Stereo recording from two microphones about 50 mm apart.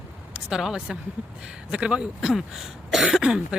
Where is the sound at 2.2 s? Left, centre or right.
Centre.